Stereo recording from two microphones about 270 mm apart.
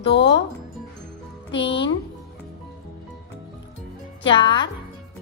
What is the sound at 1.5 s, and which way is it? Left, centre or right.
Speech, left.